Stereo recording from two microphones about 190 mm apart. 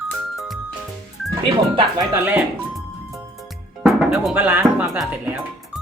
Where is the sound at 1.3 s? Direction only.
20° right (ahead or behind).